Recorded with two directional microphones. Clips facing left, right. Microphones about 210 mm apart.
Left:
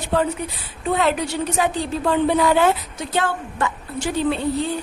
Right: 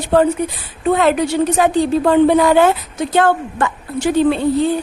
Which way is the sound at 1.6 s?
50° right (ahead or behind).